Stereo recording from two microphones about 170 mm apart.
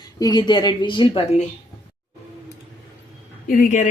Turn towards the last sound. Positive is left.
turn(degrees=50)  # may be behind; listen again after turning